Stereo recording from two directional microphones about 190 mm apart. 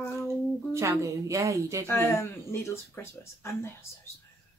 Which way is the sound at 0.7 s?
15° right (ahead or behind).